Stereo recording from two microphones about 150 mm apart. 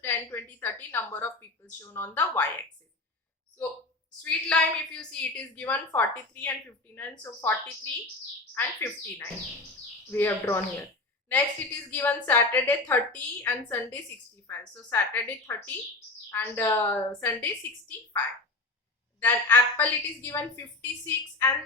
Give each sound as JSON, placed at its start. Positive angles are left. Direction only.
{"t": 0.0, "sound": "a woman's voice", "side_deg": 15}
{"t": 4.2, "sound": "a woman's voice", "side_deg": 5}
{"t": 19.2, "sound": "a woman's voice", "side_deg": 10}